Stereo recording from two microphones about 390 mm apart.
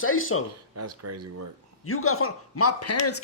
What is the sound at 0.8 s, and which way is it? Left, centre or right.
Speech, right.